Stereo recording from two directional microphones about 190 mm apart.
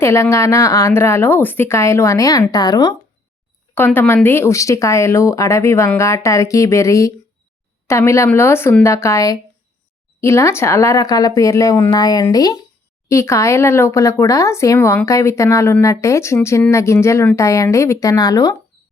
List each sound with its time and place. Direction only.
0.0 s speech: 15° left (ahead or behind)
3.8 s speech: 10° left (ahead or behind)